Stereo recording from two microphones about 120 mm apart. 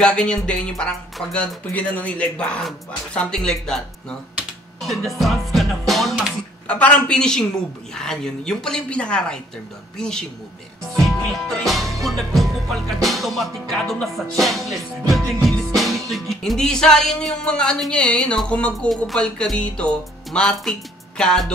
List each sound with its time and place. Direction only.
0.0 s speech: 5° left (ahead or behind)
4.8 s music: centre (ahead or behind)
6.7 s speech: 10° left (ahead or behind)
7.9 s music: 5° left (ahead or behind)